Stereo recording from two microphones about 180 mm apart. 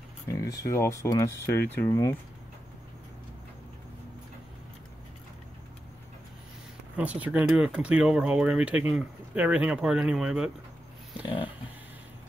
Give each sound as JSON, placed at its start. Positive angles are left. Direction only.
{"t": 0.3, "sound": "speech", "side_deg": 20}
{"t": 7.0, "sound": "speech", "side_deg": -10}